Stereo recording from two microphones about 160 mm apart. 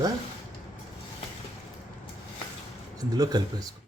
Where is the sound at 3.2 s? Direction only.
25° right (ahead or behind).